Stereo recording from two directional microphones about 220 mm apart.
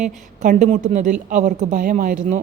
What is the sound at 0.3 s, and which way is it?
A woman's voice, 30° right (ahead or behind).